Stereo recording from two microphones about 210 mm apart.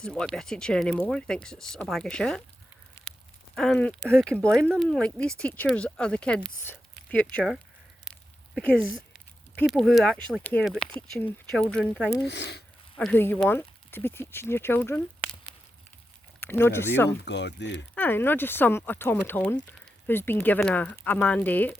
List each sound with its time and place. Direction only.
0.0 s speech: 5° left (ahead or behind)
3.5 s speech: centre (ahead or behind)
12.2 s speech: 55° left (ahead or behind)
13.0 s speech: 5° left (ahead or behind)
16.4 s speech: 10° left (ahead or behind)
17.1 s speech: 55° left (ahead or behind)
17.9 s speech: 10° left (ahead or behind)